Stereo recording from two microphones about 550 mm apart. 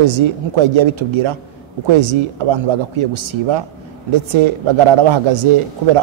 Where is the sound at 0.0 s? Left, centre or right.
Right.